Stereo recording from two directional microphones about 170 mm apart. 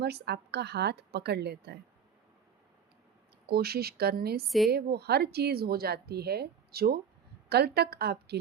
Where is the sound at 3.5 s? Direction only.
65° right (ahead or behind).